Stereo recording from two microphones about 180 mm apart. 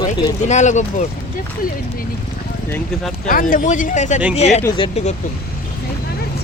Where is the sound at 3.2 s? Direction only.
50° left (ahead or behind).